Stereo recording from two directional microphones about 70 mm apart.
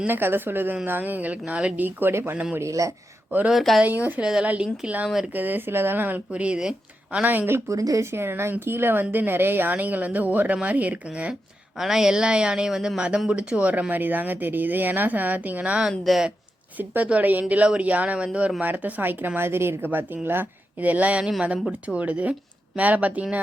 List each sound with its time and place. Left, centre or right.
0.0 s speech: right
2.3 s speech: centre
2.6 s a man's voice: right
3.5 s speech: centre
3.8 s speech: right; by 5.3 s centre
5.3 s speech: right
7.7 s a man's voice: right
8.1 s speech: right; by 11.3 s centre
11.8 s speech: centre
15.9 s speech: centre
16.7 s speech: right